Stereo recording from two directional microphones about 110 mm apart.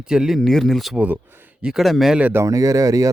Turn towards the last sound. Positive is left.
turn(degrees=-30)  # may be behind; listen again after turning